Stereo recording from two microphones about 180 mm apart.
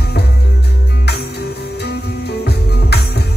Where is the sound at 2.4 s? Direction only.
65° left (ahead or behind).